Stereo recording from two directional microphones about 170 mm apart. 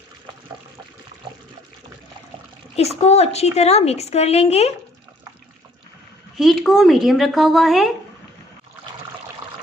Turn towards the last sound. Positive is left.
turn(degrees=0)  # may be behind; listen again after turning